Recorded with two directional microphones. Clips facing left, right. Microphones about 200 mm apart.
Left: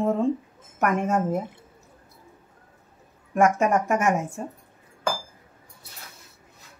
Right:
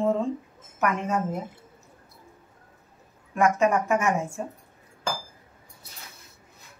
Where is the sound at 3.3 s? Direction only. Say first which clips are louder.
Left 1 dB; 45° left (ahead or behind).